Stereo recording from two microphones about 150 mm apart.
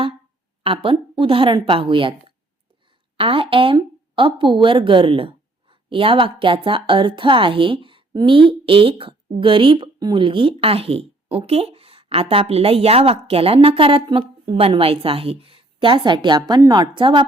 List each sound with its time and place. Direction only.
0.6 s a woman's voice: 35° right (ahead or behind)